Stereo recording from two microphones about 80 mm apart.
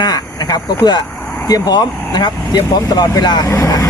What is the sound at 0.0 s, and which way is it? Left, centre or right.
Speech, left.